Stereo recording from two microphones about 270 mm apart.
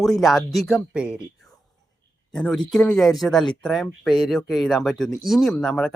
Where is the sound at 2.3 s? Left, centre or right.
Centre.